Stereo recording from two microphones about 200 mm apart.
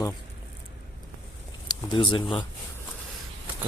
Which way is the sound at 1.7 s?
25° left (ahead or behind).